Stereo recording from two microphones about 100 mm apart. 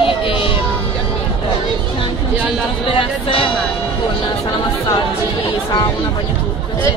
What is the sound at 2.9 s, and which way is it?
Speech, 60° left (ahead or behind).